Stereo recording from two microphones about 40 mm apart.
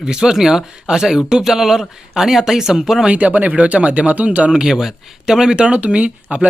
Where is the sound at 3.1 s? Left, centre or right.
Right.